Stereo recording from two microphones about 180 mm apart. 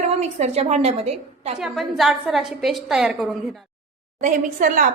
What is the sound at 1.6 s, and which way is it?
A woman's voice, centre (ahead or behind).